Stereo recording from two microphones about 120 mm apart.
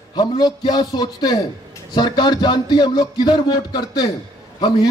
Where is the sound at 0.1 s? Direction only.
35° left (ahead or behind).